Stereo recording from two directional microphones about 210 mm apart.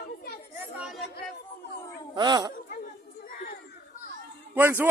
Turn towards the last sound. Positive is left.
turn(degrees=-10)  # may be behind; listen again after turning